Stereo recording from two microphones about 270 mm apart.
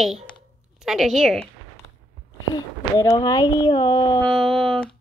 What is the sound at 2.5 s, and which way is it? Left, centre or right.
Speech, centre.